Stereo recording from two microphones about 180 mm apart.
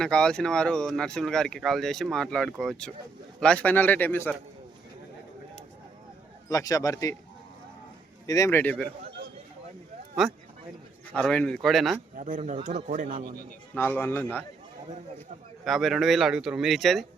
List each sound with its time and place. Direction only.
0.0 s speech: 5° left (ahead or behind)
6.5 s speech: 20° left (ahead or behind)
8.3 s speech: 15° left (ahead or behind)
11.1 s speech: 5° left (ahead or behind)
12.1 s speech: 45° right (ahead or behind)
13.7 s speech: 10° left (ahead or behind)
15.6 s speech: centre (ahead or behind)